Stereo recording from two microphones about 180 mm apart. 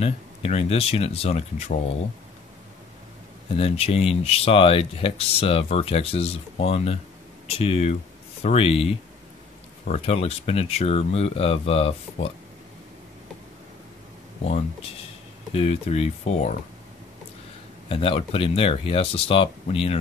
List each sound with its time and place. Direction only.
0.0 s speech: 35° left (ahead or behind)
3.5 s speech: 35° left (ahead or behind)
9.8 s speech: 35° left (ahead or behind)
14.4 s speech: 35° left (ahead or behind)
17.8 s speech: 30° left (ahead or behind)